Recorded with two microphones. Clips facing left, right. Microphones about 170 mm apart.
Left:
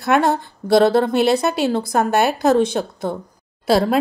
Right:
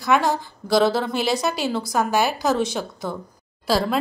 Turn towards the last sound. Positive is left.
turn(degrees=60)  # may be behind; listen again after turning